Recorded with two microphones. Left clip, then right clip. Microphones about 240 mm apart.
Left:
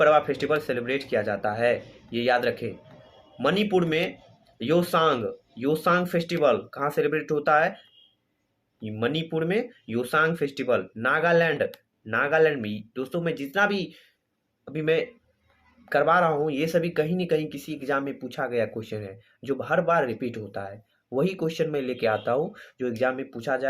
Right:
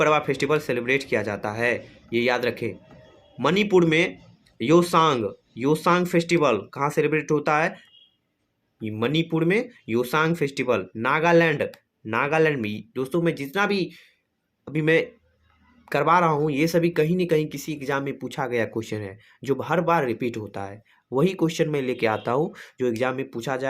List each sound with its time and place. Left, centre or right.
0.1 s speech: right
9.6 s speech: right